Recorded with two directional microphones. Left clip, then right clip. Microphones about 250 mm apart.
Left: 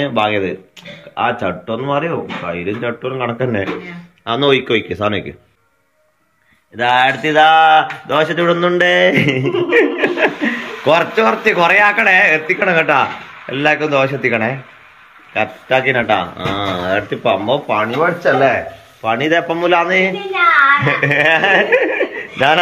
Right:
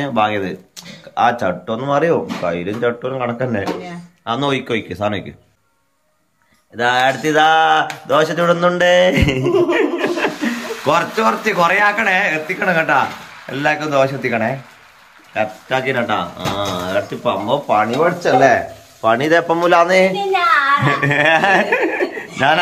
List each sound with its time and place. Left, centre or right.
0.0 s speech: centre
6.8 s a man's voice: centre